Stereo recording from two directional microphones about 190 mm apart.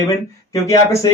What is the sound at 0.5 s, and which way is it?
Speech, 15° left (ahead or behind).